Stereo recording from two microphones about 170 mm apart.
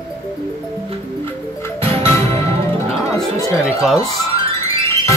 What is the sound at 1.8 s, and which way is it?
Music, 35° right (ahead or behind).